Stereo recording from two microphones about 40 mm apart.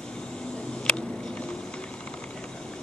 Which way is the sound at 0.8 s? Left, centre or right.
Left.